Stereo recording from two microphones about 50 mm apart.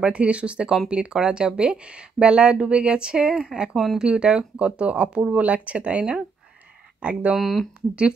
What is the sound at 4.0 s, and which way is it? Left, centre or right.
Speech, centre.